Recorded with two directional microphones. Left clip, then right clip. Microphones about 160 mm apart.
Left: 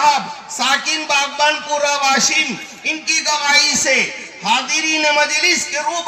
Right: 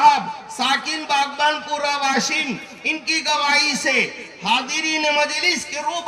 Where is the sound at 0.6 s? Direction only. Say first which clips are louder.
Left 4 dB; 40° left (ahead or behind).